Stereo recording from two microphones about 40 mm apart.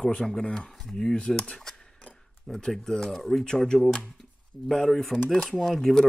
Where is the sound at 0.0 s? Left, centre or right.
Left.